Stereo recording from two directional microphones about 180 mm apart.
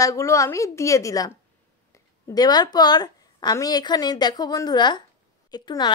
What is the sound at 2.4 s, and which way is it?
Speech, 20° left (ahead or behind).